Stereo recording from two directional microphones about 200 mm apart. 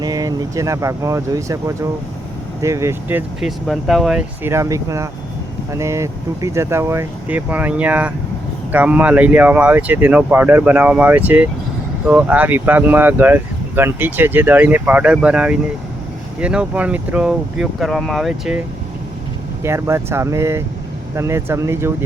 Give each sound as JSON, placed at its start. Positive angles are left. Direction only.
{"t": 0.0, "sound": "speech", "side_deg": -20}
{"t": 19.6, "sound": "speech", "side_deg": -15}